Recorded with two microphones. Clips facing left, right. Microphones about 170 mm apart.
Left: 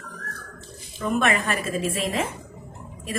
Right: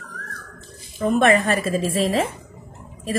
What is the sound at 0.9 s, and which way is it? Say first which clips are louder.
A woman's voice: right 6 dB; 40° right (ahead or behind).